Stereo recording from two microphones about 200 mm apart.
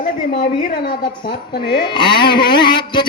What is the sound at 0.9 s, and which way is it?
A woman's voice, 25° left (ahead or behind).